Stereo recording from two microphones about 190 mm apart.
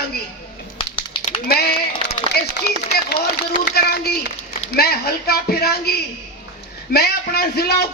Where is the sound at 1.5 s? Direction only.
55° left (ahead or behind).